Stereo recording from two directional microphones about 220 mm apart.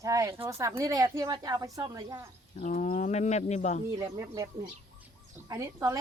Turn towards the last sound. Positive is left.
turn(degrees=-15)  # may be behind; listen again after turning